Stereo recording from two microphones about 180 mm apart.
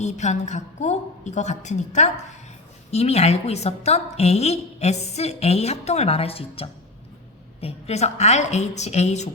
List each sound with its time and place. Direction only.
0.0 s a woman's voice: 40° left (ahead or behind)